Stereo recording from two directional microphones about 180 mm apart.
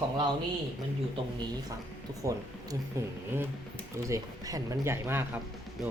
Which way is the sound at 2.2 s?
15° right (ahead or behind).